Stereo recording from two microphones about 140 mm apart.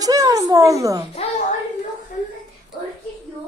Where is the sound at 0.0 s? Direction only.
25° right (ahead or behind).